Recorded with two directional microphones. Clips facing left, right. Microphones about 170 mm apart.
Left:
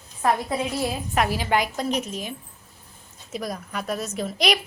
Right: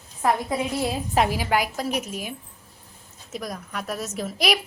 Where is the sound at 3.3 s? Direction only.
Centre (ahead or behind).